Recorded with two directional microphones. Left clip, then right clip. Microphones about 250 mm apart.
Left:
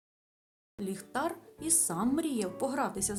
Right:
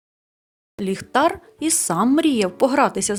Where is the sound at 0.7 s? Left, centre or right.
Left.